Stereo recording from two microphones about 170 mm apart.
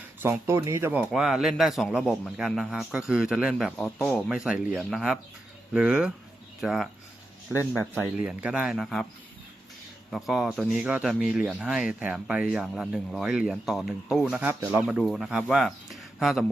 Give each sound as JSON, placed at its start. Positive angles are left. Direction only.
{"t": 0.2, "sound": "speech", "side_deg": -15}
{"t": 1.1, "sound": "speech", "side_deg": 0}
{"t": 7.5, "sound": "speech", "side_deg": 15}
{"t": 8.2, "sound": "speech", "side_deg": -5}
{"t": 10.1, "sound": "speech", "side_deg": 0}